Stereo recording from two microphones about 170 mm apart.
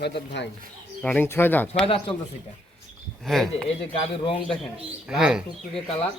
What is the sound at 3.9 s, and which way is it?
Speech, 30° left (ahead or behind).